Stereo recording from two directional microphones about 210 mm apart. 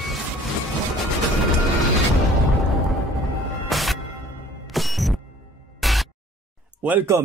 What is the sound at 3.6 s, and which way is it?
Music, centre (ahead or behind).